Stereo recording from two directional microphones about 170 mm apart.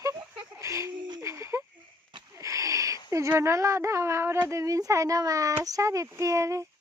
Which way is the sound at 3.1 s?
15° right (ahead or behind).